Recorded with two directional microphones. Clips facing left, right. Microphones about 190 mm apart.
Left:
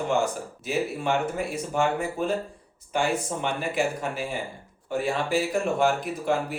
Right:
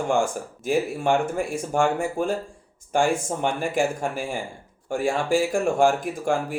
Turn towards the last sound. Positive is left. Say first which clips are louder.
# right 2 dB
turn(degrees=-50)  # may be behind; listen again after turning